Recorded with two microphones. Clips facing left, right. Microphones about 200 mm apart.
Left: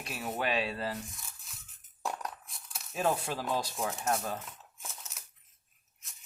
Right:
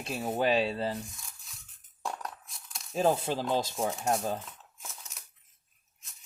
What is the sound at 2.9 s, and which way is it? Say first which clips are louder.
Speech: right 4 dB; 30° right (ahead or behind).